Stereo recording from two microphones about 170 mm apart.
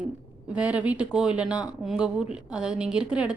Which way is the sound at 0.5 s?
10° right (ahead or behind).